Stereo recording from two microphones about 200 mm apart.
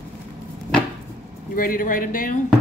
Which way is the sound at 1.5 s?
45° left (ahead or behind).